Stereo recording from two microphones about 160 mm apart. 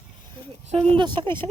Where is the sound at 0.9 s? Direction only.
30° right (ahead or behind).